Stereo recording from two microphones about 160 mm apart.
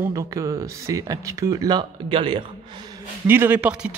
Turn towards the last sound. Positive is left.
turn(degrees=-5)  # may be behind; listen again after turning